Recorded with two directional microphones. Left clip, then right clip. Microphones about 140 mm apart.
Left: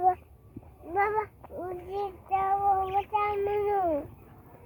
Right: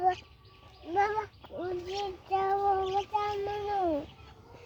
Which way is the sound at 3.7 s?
10° left (ahead or behind).